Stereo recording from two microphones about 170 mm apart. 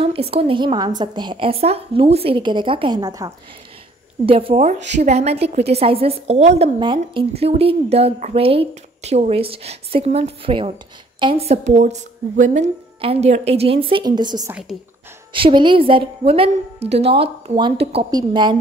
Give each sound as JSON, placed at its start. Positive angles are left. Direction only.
{"t": 0.0, "sound": "a woman's voice", "side_deg": -35}
{"t": 4.3, "sound": "a woman's voice", "side_deg": -35}
{"t": 6.8, "sound": "a woman's voice", "side_deg": -30}
{"t": 14.5, "sound": "a woman's voice", "side_deg": 0}
{"t": 15.3, "sound": "a woman's voice", "side_deg": -30}